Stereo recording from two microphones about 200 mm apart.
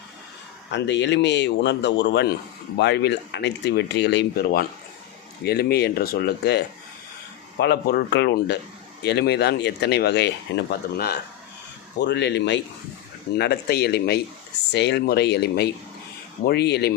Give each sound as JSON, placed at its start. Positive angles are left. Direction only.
{"t": 0.7, "sound": "speech", "side_deg": 60}